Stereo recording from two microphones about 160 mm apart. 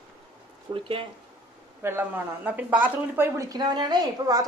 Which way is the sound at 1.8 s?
15° right (ahead or behind).